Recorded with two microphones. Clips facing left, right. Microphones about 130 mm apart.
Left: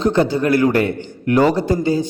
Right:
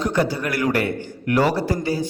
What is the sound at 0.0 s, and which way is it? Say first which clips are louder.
A man's voice: left 6 dB; 25° left (ahead or behind).